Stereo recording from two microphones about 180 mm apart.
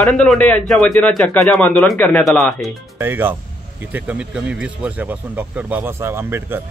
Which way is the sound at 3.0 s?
10° right (ahead or behind).